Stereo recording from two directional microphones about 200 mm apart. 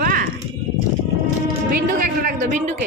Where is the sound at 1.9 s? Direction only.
40° right (ahead or behind).